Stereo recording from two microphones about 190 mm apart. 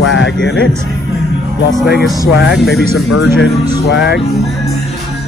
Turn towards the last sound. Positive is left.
turn(degrees=65)  # may be behind; listen again after turning